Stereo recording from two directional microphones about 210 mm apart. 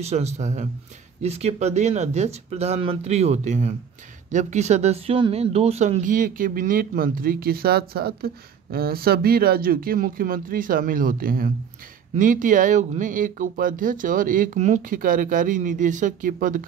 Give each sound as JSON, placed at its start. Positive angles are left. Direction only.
{"t": 0.0, "sound": "speech", "side_deg": -30}